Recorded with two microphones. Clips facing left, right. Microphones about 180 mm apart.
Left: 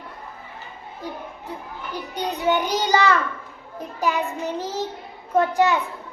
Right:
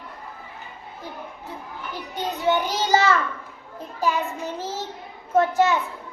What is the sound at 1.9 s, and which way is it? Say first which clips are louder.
Child singing: left 2 dB; 15° left (ahead or behind).